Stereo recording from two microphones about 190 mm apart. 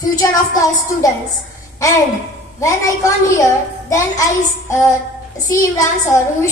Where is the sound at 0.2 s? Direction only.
15° left (ahead or behind).